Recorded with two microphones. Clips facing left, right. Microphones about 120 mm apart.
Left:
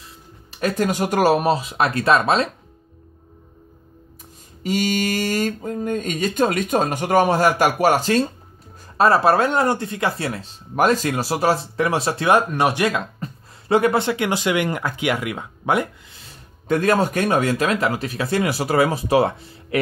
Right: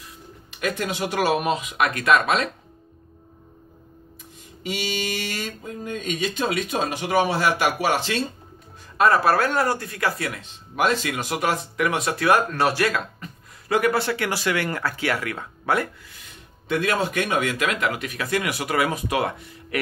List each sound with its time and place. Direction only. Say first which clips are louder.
0.5 s speech: left 5 dB; 35° left (ahead or behind)
4.6 s speech: left 7 dB; 45° left (ahead or behind)
8.9 s speech: left 3 dB; 30° left (ahead or behind)
16.3 s speech: left 5 dB; 40° left (ahead or behind)